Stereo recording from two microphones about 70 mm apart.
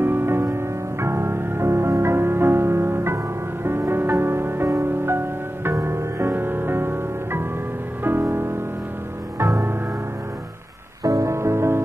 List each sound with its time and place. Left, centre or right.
0.0 s music: right
6.3 s music: right
11.1 s music: right